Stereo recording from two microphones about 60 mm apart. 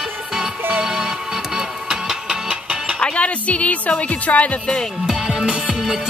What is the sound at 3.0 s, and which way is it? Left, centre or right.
A woman's voice, centre.